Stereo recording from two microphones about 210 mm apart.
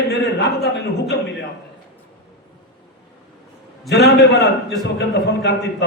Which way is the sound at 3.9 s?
50° left (ahead or behind).